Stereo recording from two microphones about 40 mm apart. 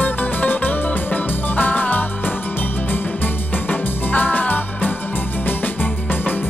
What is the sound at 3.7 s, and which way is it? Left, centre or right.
Music, left.